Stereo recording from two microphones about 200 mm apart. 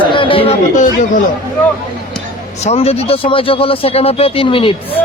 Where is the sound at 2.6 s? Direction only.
30° left (ahead or behind).